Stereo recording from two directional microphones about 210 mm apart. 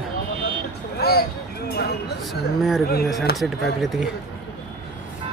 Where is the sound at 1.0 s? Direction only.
50° left (ahead or behind).